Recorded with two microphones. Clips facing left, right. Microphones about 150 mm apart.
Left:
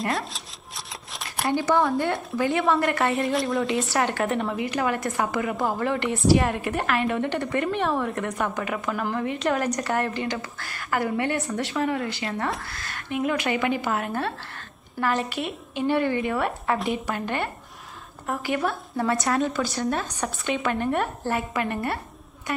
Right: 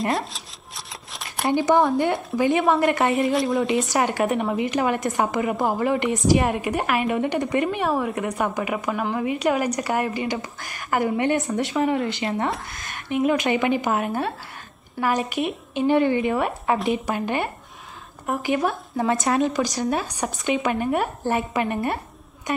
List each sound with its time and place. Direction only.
0.1 s shuffling cards: centre (ahead or behind)
1.5 s a woman's voice: 20° right (ahead or behind)
3.2 s a woman's voice: centre (ahead or behind)
3.6 s a woman's voice: 20° right (ahead or behind)